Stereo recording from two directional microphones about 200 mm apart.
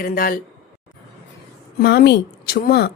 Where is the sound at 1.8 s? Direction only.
55° left (ahead or behind).